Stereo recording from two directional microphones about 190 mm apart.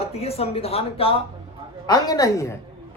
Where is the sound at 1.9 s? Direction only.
20° left (ahead or behind).